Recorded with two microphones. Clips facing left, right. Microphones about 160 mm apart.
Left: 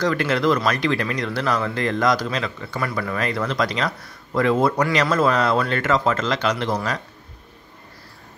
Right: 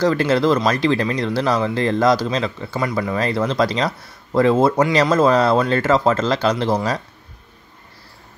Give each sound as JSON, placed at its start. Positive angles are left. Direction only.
{"t": 0.0, "sound": "speech", "side_deg": -30}